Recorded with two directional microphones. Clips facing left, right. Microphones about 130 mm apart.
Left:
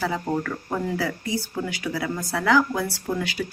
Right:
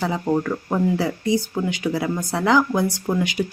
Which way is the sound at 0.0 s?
25° right (ahead or behind).